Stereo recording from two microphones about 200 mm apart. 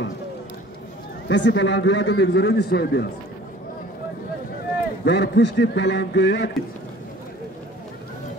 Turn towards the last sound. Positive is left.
turn(degrees=60)  # may be behind; listen again after turning